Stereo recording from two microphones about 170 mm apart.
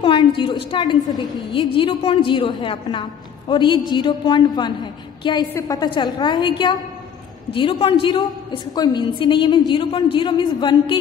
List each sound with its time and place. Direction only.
0.0 s a sound: 30° left (ahead or behind)
0.7 s a woman's voice: 30° left (ahead or behind)
7.5 s a woman's voice: 30° left (ahead or behind)